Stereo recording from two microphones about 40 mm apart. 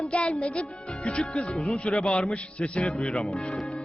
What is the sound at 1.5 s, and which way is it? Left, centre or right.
Child singing, left.